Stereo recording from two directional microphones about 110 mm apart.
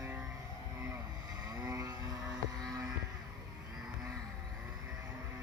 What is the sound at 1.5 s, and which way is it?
Vehicle, 35° right (ahead or behind).